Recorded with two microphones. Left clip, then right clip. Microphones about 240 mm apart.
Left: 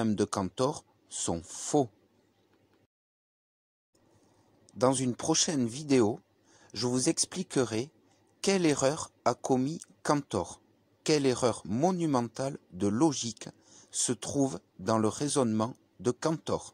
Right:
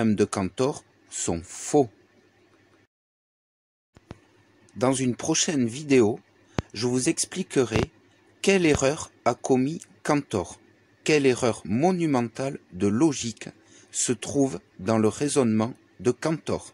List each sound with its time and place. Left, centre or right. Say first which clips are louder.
0.0 s speech: right 6 dB; centre
4.7 s speech: right 3 dB; centre